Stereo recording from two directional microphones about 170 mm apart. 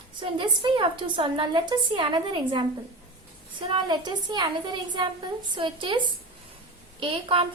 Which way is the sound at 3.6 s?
30° right (ahead or behind).